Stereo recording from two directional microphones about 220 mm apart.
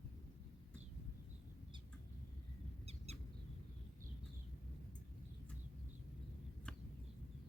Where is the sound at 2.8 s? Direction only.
30° right (ahead or behind).